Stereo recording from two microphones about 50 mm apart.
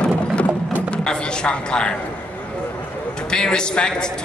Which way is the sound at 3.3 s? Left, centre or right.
Centre.